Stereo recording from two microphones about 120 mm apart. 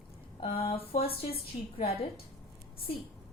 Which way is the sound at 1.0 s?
55° left (ahead or behind).